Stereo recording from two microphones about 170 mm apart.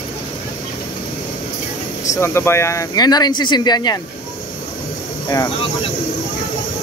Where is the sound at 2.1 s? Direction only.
15° left (ahead or behind).